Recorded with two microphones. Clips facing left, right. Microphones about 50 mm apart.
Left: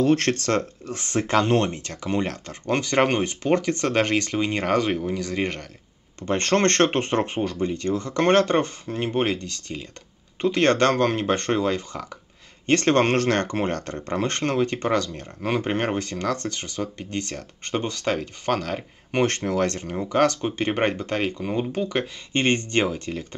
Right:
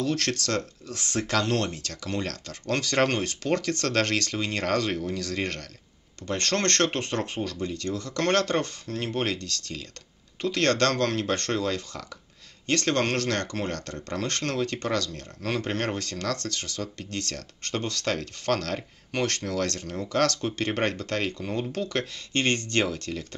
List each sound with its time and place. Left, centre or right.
0.0 s speech: left; by 18.9 s centre
19.1 s speech: left